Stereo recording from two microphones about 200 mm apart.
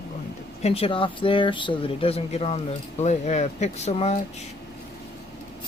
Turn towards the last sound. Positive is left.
turn(degrees=35)  # may be behind; listen again after turning